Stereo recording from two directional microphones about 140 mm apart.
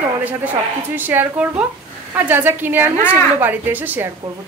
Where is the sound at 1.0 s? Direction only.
15° right (ahead or behind).